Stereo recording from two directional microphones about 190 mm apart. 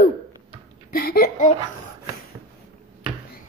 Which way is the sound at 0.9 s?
50° left (ahead or behind).